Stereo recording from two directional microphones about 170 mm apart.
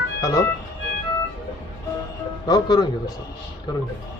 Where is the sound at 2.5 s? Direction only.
25° left (ahead or behind).